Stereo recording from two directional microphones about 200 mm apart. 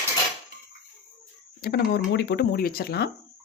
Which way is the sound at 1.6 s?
55° left (ahead or behind).